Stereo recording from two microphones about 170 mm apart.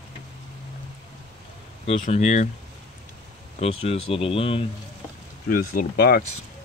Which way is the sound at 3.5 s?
35° left (ahead or behind).